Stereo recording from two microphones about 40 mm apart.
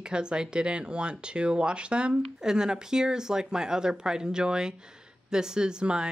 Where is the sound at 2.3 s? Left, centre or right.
Centre.